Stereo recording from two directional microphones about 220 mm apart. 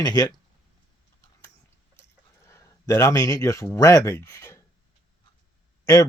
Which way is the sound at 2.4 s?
15° left (ahead or behind).